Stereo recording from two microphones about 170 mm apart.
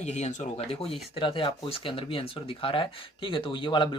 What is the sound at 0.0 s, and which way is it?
Speech, 40° left (ahead or behind).